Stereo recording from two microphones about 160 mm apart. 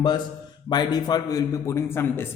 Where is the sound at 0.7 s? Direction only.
25° left (ahead or behind).